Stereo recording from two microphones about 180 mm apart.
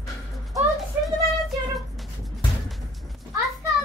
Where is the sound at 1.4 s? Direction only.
Centre (ahead or behind).